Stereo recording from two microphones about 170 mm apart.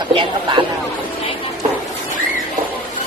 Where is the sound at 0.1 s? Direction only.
30° right (ahead or behind).